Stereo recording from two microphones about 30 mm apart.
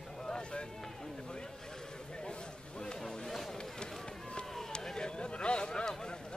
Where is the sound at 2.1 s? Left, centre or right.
Left.